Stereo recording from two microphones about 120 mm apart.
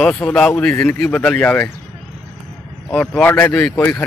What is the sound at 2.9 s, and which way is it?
Speech, 10° left (ahead or behind).